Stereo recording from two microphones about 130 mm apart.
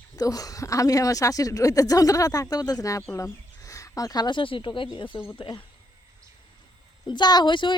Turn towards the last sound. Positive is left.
turn(degrees=40)  # may be behind; listen again after turning